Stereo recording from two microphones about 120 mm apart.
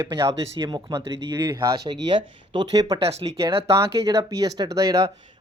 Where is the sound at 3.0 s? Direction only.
50° right (ahead or behind).